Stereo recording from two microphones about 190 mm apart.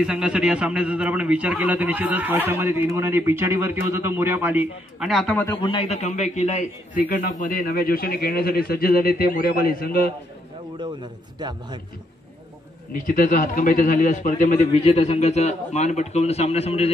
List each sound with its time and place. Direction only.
0.0 s a man's voice: 5° right (ahead or behind)
5.6 s a man's voice: 30° left (ahead or behind); by 10.1 s 50° left (ahead or behind)
11.3 s a man's voice: 25° right (ahead or behind)
12.9 s a man's voice: 45° left (ahead or behind)